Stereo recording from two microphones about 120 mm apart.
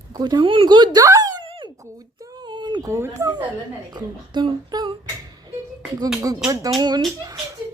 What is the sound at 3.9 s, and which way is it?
Speech, 40° right (ahead or behind).